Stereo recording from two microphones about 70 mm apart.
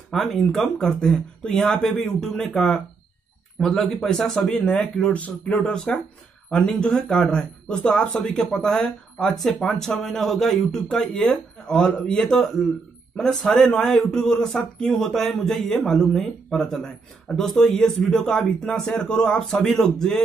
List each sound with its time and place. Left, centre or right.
0.1 s speech: centre